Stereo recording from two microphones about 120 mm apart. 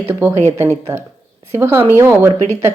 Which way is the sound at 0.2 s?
20° right (ahead or behind).